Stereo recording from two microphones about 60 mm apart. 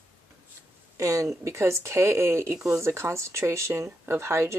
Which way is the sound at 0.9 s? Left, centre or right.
Right.